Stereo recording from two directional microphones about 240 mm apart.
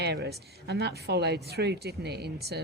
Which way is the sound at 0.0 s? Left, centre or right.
Right.